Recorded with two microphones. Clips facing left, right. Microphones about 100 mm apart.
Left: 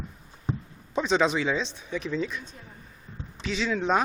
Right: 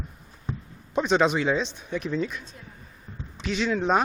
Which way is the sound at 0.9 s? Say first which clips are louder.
Right 2 dB; 5° right (ahead or behind).